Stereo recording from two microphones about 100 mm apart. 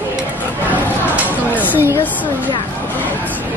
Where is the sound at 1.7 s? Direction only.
20° right (ahead or behind).